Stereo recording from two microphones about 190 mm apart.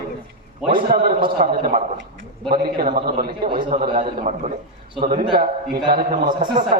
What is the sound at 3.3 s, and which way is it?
Speech, 25° right (ahead or behind).